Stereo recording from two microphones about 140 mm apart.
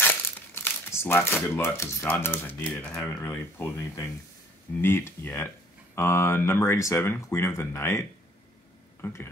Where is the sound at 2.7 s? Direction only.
10° left (ahead or behind).